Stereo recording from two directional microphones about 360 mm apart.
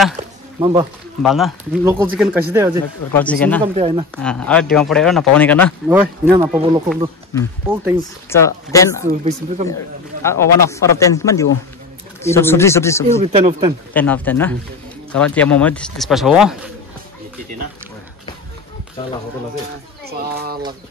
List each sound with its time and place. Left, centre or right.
0.6 s speech: centre
1.2 s speech: centre
3.1 s speech: centre
3.7 s speech: centre
4.2 s speech: centre
7.3 s a man's voice: centre
9.0 s speech: centre
10.2 s a man's voice: centre
13.2 s speech: centre
13.9 s speech: centre
20.1 s speech: right